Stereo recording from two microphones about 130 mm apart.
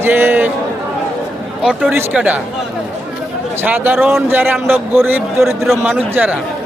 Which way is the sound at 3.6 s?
15° right (ahead or behind).